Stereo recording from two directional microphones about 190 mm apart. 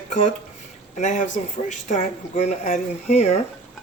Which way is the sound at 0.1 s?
40° left (ahead or behind).